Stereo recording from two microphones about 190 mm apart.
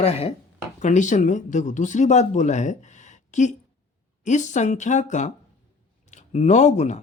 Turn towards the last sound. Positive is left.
turn(degrees=40)  # may be behind; listen again after turning